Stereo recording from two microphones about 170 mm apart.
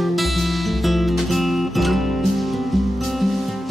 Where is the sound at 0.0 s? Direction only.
Centre (ahead or behind).